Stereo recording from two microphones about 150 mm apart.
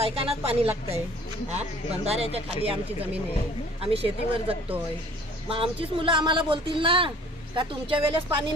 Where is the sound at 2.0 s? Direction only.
45° right (ahead or behind).